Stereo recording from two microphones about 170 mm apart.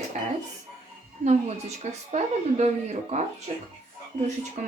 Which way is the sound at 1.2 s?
40° right (ahead or behind).